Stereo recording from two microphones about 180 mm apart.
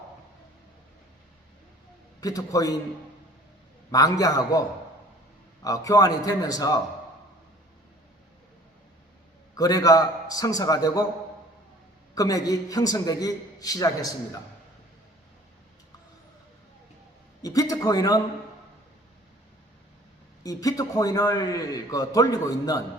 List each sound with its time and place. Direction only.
2.2 s a man's voice: 20° left (ahead or behind)
3.9 s a man's voice: 20° left (ahead or behind)
5.6 s a man's voice: 20° left (ahead or behind)
9.6 s a man's voice: 20° left (ahead or behind)
12.1 s a man's voice: 20° left (ahead or behind)
17.4 s a man's voice: 20° left (ahead or behind)
20.4 s a man's voice: 20° left (ahead or behind)